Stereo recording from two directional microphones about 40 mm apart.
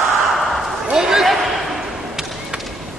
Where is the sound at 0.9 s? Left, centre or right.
Centre.